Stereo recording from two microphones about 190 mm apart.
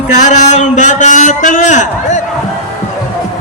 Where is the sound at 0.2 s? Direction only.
40° left (ahead or behind).